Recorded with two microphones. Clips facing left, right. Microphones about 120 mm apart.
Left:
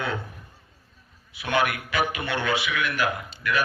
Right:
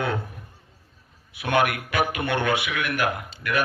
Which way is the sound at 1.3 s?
55° right (ahead or behind).